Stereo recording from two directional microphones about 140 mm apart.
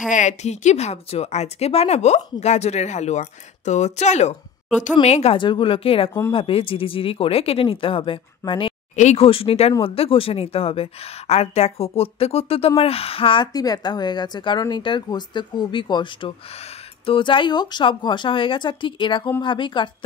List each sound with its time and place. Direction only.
0.1 s speech: 60° left (ahead or behind); by 8.7 s 40° left (ahead or behind)
8.9 s speech: 50° left (ahead or behind)
13.5 s speech: 25° left (ahead or behind)